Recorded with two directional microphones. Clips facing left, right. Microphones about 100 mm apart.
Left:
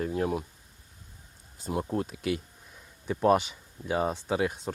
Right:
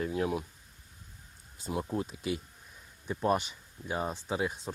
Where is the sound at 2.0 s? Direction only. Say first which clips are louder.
Left 4 dB; 60° left (ahead or behind).